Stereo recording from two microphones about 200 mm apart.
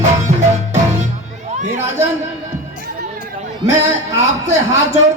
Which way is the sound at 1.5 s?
35° right (ahead or behind).